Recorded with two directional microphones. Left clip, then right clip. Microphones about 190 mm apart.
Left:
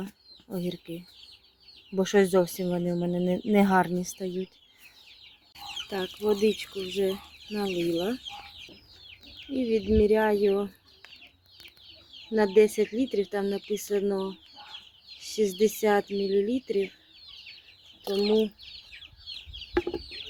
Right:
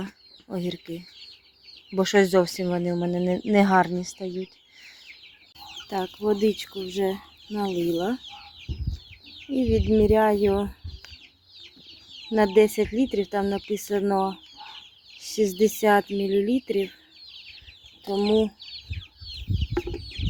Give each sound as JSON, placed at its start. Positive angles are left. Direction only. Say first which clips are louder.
{"t": 0.0, "sound": "speech", "louder": "right 3 dB", "side_deg": -15}
{"t": 2.0, "sound": "speech", "louder": "right 3 dB", "side_deg": -10}
{"t": 5.9, "sound": "speech", "louder": "right 3 dB", "side_deg": -15}
{"t": 9.5, "sound": "speech", "louder": "right 3 dB", "side_deg": -20}
{"t": 12.3, "sound": "speech", "louder": "right 2 dB", "side_deg": -20}